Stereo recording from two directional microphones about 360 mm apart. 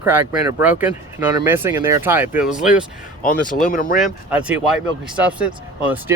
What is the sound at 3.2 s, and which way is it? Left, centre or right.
Speech, left.